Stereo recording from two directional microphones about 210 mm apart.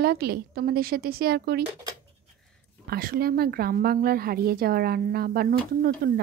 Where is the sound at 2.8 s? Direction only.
45° right (ahead or behind).